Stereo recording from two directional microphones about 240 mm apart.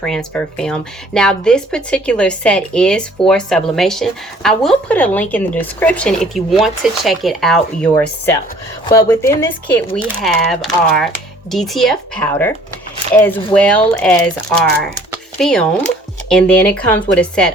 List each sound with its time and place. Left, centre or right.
0.0 s speech: centre
16.7 s speech: centre